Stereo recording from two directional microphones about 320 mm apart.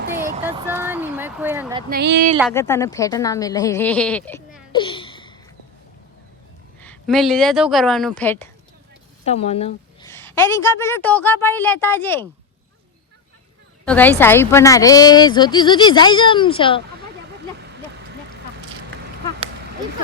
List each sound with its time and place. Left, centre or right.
0.4 s speech: centre
1.9 s a sound: right
2.5 s speech: centre
6.8 s speech: centre
9.2 s speech: centre
10.1 s a woman's voice: centre
13.8 s a woman's voice: centre
17.6 s a sound: right